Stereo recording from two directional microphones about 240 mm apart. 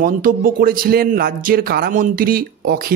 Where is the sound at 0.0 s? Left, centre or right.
Right.